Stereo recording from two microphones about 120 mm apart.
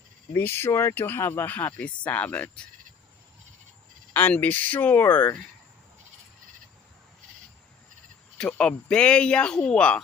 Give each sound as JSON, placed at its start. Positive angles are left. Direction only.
{"t": 0.3, "sound": "speech", "side_deg": 20}
{"t": 4.1, "sound": "speech", "side_deg": 15}
{"t": 8.4, "sound": "speech", "side_deg": 5}